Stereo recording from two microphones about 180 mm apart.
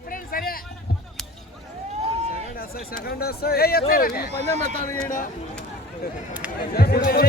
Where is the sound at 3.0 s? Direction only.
60° left (ahead or behind).